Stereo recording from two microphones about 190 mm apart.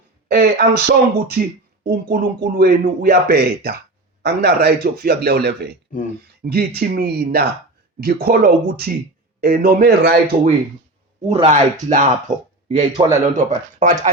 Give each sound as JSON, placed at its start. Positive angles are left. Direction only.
{"t": 0.3, "sound": "speech", "side_deg": -60}
{"t": 5.9, "sound": "speech", "side_deg": 45}
{"t": 6.4, "sound": "speech", "side_deg": -55}
{"t": 11.3, "sound": "speech", "side_deg": -35}